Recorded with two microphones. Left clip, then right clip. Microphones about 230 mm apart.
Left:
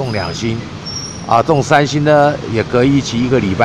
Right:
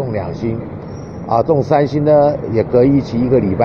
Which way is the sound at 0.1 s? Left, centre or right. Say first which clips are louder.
Left 1 dB; left.